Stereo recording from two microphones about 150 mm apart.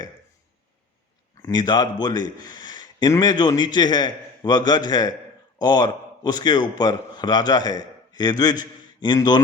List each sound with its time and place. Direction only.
1.4 s a man's voice: 25° left (ahead or behind)